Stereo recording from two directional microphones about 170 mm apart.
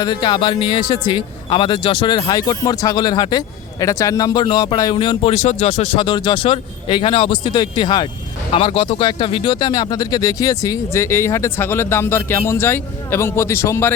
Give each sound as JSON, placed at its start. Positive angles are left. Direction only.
{"t": 0.0, "sound": "speech", "side_deg": 25}